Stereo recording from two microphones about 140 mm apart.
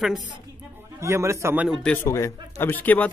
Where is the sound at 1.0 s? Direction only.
20° right (ahead or behind).